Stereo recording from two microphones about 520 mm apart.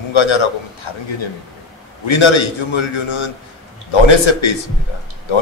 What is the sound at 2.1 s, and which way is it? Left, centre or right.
Speech, left.